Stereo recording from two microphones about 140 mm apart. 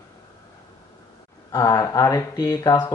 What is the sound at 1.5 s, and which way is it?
Speech, 25° left (ahead or behind).